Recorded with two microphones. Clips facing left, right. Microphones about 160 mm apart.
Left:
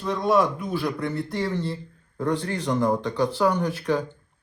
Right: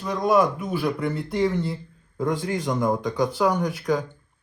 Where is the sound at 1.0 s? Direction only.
15° right (ahead or behind).